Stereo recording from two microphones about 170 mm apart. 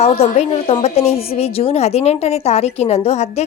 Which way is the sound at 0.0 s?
40° left (ahead or behind).